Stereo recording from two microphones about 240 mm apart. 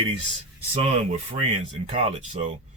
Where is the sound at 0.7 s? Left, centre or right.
Right.